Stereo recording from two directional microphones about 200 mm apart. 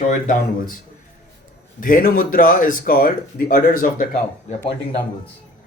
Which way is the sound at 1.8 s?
45° left (ahead or behind).